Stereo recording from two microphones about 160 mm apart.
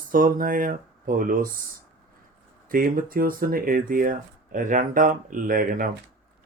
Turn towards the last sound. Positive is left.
turn(degrees=-65)  # may be behind; listen again after turning